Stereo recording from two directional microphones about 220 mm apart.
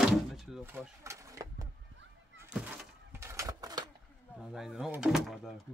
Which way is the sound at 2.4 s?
5° right (ahead or behind).